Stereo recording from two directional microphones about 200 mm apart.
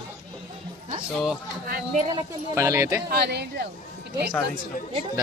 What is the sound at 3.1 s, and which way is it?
Speech, 55° right (ahead or behind).